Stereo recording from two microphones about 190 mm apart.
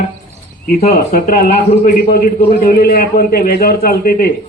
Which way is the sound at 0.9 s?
50° left (ahead or behind).